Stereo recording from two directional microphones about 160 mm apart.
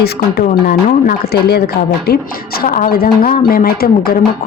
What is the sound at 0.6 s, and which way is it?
Speech, 75° left (ahead or behind).